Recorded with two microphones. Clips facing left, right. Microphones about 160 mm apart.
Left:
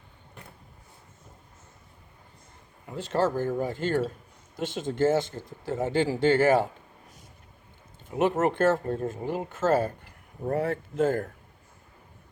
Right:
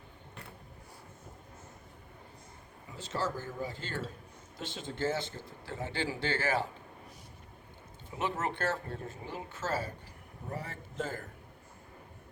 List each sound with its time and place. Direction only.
2.8 s speech: 60° left (ahead or behind)
8.1 s speech: 50° left (ahead or behind)